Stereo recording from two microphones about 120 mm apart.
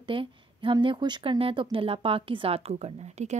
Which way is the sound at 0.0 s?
45° right (ahead or behind).